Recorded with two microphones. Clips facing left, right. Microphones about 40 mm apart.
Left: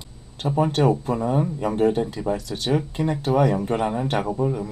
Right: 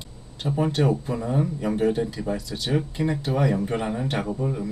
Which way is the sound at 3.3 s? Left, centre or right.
Centre.